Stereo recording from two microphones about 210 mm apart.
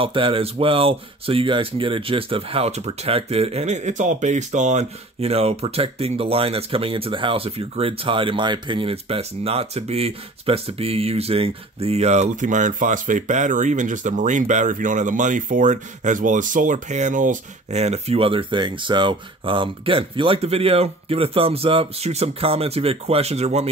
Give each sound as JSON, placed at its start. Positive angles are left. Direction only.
{"t": 0.0, "sound": "speech", "side_deg": -25}